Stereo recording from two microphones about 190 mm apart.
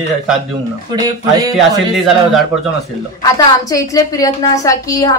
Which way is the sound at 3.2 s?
20° left (ahead or behind).